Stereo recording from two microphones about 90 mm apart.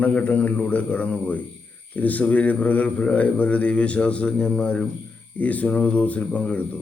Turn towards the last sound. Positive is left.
turn(degrees=15)  # may be behind; listen again after turning